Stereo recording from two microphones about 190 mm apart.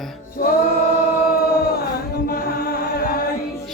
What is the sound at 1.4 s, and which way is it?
Chant, 55° left (ahead or behind).